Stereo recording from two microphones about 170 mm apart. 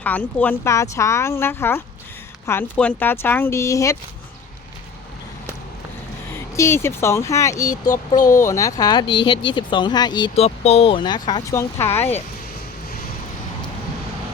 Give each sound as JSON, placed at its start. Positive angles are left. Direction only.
{"t": 0.0, "sound": "speech", "side_deg": 10}
{"t": 6.6, "sound": "speech", "side_deg": 15}
{"t": 10.3, "sound": "speech", "side_deg": 40}
{"t": 11.8, "sound": "speech", "side_deg": 15}